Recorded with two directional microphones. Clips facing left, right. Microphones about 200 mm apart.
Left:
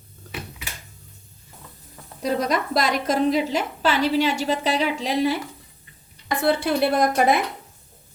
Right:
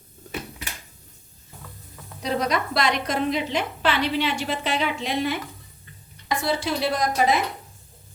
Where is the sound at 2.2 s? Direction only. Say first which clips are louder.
Left 2 dB; 45° left (ahead or behind).